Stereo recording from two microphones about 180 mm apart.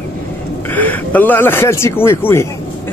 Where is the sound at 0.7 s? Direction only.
10° left (ahead or behind).